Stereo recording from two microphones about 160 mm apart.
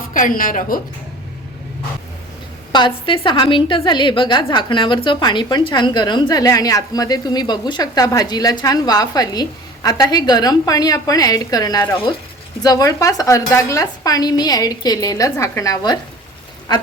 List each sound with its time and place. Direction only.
0.1 s a woman's voice: 55° left (ahead or behind)
2.7 s a woman's voice: 30° left (ahead or behind)